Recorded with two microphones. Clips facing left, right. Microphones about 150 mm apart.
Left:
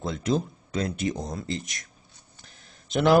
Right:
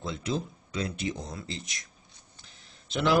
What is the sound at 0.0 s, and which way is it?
Speech, 45° left (ahead or behind).